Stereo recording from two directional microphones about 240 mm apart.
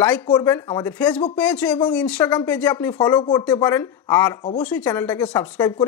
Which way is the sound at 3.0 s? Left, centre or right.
Centre.